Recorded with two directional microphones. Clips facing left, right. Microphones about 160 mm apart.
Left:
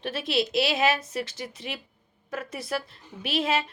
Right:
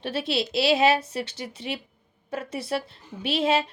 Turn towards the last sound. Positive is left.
turn(degrees=-30)  # may be behind; listen again after turning